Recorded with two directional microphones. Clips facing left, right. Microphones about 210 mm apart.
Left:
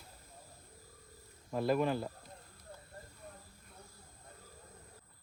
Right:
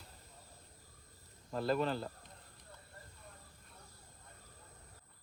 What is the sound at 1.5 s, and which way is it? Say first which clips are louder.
Speech: left 3 dB; 10° left (ahead or behind).